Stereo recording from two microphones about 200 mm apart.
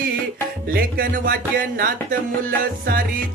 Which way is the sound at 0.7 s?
45° right (ahead or behind).